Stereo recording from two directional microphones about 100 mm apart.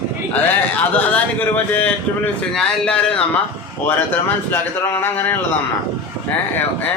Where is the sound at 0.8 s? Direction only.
15° left (ahead or behind).